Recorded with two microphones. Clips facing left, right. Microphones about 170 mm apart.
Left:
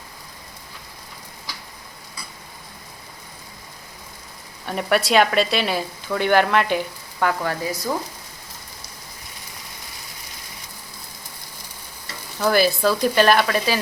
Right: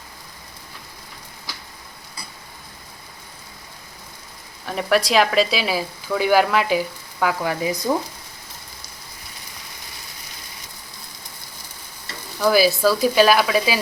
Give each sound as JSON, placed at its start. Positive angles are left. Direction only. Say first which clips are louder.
{"t": 4.6, "sound": "speech", "louder": "right 1 dB", "side_deg": 0}
{"t": 7.6, "sound": "speech", "louder": "right 3 dB", "side_deg": -15}
{"t": 12.4, "sound": "speech", "louder": "right 2 dB", "side_deg": -5}